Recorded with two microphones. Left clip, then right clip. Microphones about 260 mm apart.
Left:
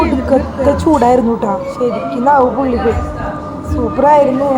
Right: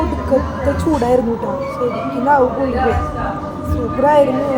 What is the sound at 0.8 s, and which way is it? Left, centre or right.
Speech, centre.